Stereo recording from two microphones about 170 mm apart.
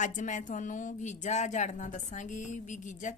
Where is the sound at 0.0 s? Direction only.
45° left (ahead or behind).